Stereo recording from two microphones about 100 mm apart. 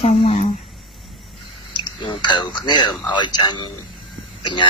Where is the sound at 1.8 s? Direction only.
55° left (ahead or behind).